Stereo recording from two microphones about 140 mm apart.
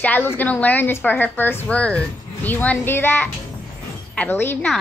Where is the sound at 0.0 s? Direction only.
15° left (ahead or behind).